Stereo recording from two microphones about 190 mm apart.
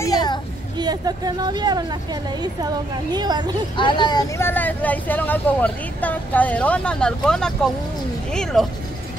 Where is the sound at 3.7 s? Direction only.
25° left (ahead or behind); by 8.7 s centre (ahead or behind).